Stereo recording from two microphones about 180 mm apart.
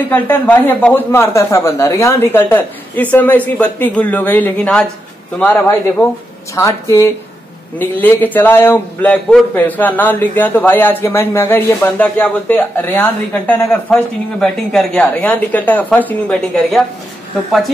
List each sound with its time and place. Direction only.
0.1 s a man's voice: 10° left (ahead or behind)